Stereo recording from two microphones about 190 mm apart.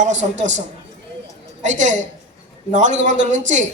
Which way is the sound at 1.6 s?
40° right (ahead or behind).